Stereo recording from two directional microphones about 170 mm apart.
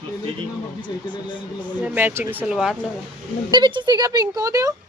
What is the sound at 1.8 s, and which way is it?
Speech, 10° right (ahead or behind).